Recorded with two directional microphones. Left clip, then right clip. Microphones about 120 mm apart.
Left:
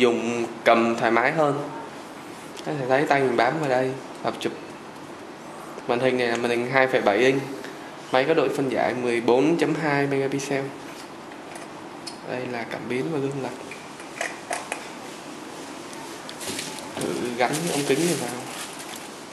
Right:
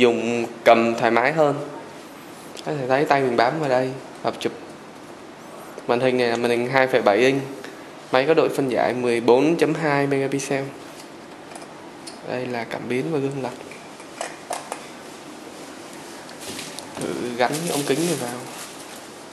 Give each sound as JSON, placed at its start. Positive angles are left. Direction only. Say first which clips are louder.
{"t": 0.0, "sound": "a man's voice", "louder": "right 3 dB", "side_deg": -15}
{"t": 2.7, "sound": "speech", "louder": "right 2 dB", "side_deg": -20}
{"t": 5.9, "sound": "speech", "louder": "right 3 dB", "side_deg": -25}
{"t": 12.3, "sound": "speech", "louder": "right 3 dB", "side_deg": -20}
{"t": 17.4, "sound": "a man's voice", "louder": "right 2 dB", "side_deg": -20}